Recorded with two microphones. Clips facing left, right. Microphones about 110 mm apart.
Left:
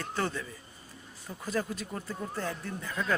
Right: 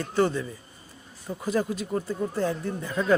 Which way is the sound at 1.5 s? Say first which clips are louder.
Right 7 dB; 15° right (ahead or behind).